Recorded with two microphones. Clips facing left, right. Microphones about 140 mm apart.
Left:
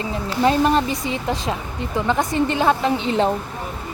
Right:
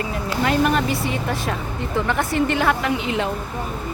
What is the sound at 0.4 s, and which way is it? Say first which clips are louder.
A woman's voice: left 3 dB; 30° left (ahead or behind).